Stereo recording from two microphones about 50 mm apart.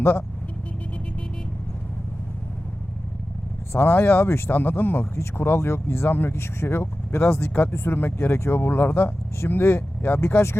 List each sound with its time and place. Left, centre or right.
0.0 s speech: left
3.7 s speech: left
5.1 s speech: left
6.3 s speech: left
7.3 s speech: left